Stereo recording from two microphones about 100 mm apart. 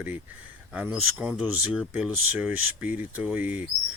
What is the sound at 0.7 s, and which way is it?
Speech, 10° right (ahead or behind).